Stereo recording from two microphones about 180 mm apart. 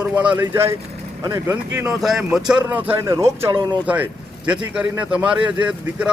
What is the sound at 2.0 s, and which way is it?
A man's voice, centre (ahead or behind).